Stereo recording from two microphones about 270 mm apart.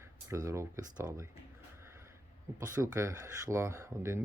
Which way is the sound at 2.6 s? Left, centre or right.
Centre.